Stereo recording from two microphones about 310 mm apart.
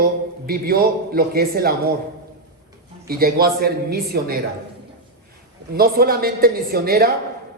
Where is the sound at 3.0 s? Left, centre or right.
Right.